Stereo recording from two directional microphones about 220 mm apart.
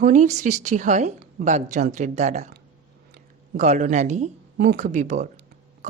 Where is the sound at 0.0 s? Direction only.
35° right (ahead or behind).